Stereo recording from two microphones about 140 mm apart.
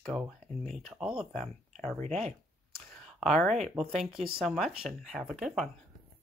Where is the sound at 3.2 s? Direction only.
5° left (ahead or behind).